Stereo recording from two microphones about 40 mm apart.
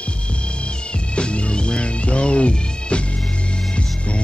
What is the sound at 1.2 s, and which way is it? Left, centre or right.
Music, left.